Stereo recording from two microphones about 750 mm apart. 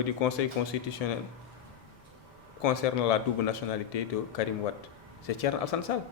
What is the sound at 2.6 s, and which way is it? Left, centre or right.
Speech, left.